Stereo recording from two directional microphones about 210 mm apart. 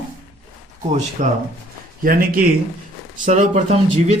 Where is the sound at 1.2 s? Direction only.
35° right (ahead or behind).